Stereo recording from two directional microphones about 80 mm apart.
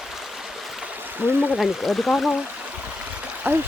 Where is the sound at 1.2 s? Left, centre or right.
Right.